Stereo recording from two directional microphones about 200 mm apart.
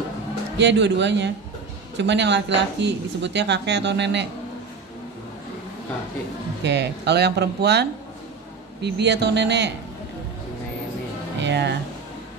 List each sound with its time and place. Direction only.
0.6 s speech: 60° right (ahead or behind)
6.6 s speech: 60° right (ahead or behind)
11.4 s speech: 60° right (ahead or behind)